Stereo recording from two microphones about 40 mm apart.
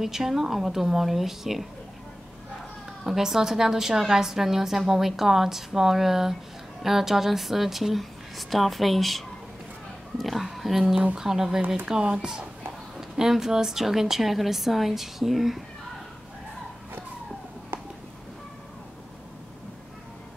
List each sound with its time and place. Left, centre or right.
0.0 s a woman's voice: centre
3.0 s a woman's voice: centre